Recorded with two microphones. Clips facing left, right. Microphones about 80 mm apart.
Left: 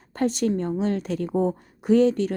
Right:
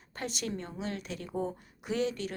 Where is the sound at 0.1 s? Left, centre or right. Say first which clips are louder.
Left 13 dB; left.